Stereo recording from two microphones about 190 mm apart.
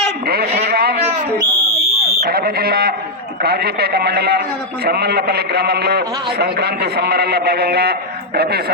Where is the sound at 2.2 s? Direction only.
50° right (ahead or behind).